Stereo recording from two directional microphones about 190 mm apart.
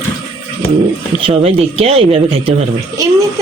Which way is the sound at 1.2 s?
30° right (ahead or behind).